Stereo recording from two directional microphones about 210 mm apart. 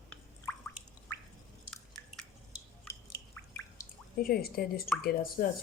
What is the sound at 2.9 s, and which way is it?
Drip, 15° left (ahead or behind).